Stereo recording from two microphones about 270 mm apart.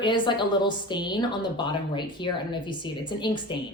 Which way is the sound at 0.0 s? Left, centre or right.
Centre.